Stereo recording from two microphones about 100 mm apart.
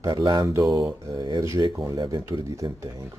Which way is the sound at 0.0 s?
40° right (ahead or behind).